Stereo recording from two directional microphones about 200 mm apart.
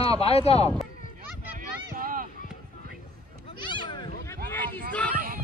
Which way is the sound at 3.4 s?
25° left (ahead or behind).